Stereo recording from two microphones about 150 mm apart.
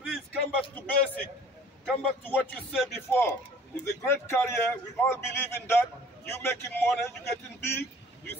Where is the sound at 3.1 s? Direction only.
15° left (ahead or behind).